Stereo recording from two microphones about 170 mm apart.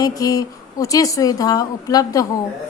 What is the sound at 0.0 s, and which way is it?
A woman's voice, 20° left (ahead or behind).